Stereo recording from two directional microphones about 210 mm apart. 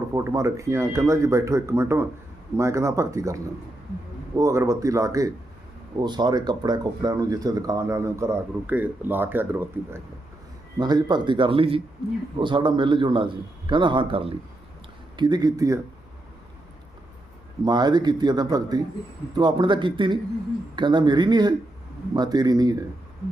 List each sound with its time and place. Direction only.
0.1 s speech: 15° right (ahead or behind)
10.8 s a man's voice: 20° right (ahead or behind)
17.7 s a man's voice: 20° right (ahead or behind)